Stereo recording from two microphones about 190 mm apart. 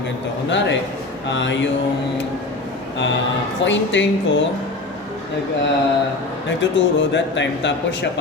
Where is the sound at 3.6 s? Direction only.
70° left (ahead or behind).